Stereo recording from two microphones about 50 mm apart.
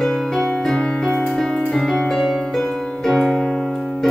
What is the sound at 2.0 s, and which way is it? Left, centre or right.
Piano, centre.